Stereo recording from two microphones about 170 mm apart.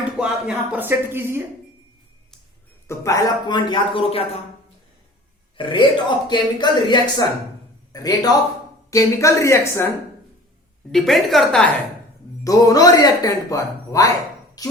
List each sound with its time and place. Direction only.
0.2 s speech: 5° right (ahead or behind)
2.8 s speech: 15° left (ahead or behind); by 4.4 s 35° left (ahead or behind)
5.5 s a woman's voice: 30° left (ahead or behind)
10.9 s speech: centre (ahead or behind)
12.5 s speech: 20° left (ahead or behind)
14.6 s a sound: 20° left (ahead or behind)